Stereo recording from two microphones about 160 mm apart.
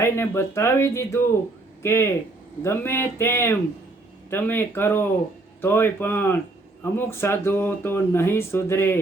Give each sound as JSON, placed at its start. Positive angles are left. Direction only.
{"t": 0.0, "sound": "speech", "side_deg": 15}